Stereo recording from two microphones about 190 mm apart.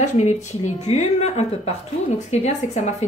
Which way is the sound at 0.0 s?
40° left (ahead or behind).